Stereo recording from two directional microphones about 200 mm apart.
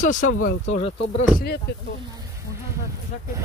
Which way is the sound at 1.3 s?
50° left (ahead or behind).